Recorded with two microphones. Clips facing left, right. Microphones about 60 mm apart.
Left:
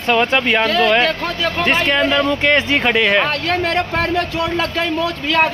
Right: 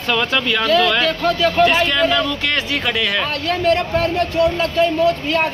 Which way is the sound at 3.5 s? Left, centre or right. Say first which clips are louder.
Right 1 dB; left.